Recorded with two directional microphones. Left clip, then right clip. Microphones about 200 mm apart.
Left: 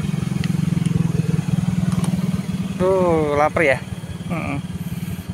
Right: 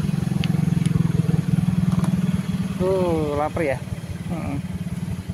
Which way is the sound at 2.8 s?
10° left (ahead or behind).